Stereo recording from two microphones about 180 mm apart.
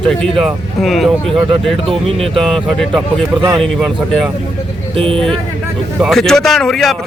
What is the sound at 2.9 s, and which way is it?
Speech, 25° right (ahead or behind).